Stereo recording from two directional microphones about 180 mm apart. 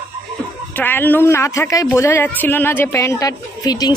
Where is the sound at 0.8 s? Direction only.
10° left (ahead or behind).